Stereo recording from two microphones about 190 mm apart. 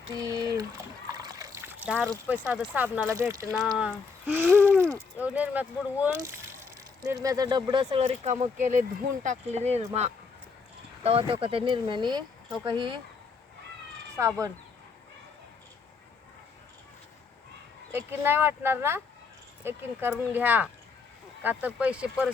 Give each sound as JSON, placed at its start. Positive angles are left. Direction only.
{"t": 0.1, "sound": "speech", "side_deg": -20}
{"t": 1.0, "sound": "trickle", "side_deg": -20}
{"t": 2.5, "sound": "speech", "side_deg": -10}
{"t": 14.2, "sound": "speech", "side_deg": -15}
{"t": 17.9, "sound": "speech", "side_deg": -10}